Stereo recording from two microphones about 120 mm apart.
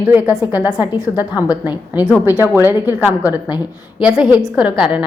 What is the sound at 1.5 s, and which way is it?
Speech, 35° left (ahead or behind).